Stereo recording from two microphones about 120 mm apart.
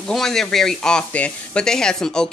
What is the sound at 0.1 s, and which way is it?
Speech, 5° left (ahead or behind).